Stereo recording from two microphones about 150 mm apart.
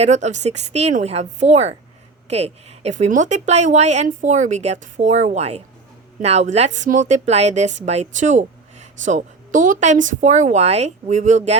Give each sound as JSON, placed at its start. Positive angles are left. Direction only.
{"t": 0.0, "sound": "speech", "side_deg": -50}